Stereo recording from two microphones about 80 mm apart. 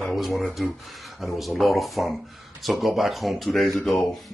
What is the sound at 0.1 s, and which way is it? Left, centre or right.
Speech, centre.